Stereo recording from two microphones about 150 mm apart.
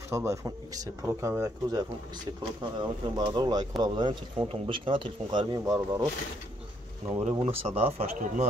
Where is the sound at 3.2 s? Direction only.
30° right (ahead or behind).